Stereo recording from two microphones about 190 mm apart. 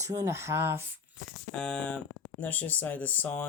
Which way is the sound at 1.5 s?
5° left (ahead or behind).